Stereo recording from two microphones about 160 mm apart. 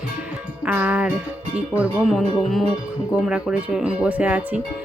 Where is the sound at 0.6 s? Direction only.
10° right (ahead or behind).